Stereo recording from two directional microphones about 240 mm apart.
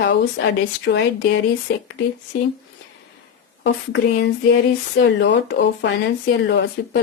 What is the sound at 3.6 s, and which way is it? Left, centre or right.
Speech, left.